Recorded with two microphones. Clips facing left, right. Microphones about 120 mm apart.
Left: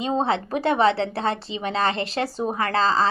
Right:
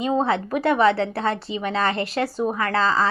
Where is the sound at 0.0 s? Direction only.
25° left (ahead or behind).